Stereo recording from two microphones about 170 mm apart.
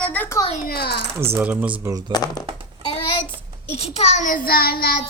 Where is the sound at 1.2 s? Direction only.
15° right (ahead or behind).